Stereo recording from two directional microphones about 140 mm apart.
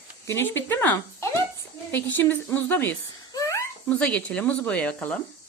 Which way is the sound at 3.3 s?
20° left (ahead or behind).